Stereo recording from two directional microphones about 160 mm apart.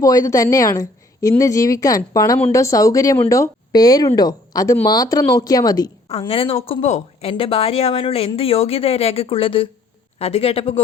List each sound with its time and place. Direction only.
0.0 s speech: 20° left (ahead or behind)
6.1 s a woman's voice: 35° left (ahead or behind)